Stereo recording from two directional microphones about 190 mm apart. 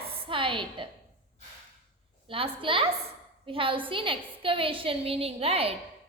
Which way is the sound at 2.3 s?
25° right (ahead or behind).